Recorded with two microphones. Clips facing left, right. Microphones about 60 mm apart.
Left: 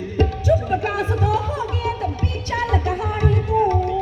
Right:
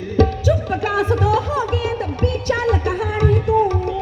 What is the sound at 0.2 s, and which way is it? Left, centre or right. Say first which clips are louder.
Music: right 2 dB; right.